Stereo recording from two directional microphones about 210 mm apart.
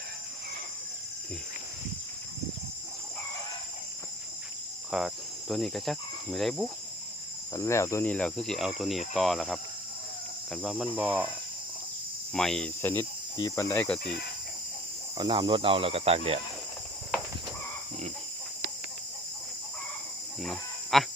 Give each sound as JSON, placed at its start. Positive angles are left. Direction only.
{"t": 4.9, "sound": "cricket", "side_deg": 0}
{"t": 7.5, "sound": "speech", "side_deg": 15}
{"t": 12.3, "sound": "speech", "side_deg": 5}
{"t": 13.3, "sound": "speech", "side_deg": 15}
{"t": 15.2, "sound": "speech", "side_deg": -25}
{"t": 20.4, "sound": "chicken", "side_deg": 0}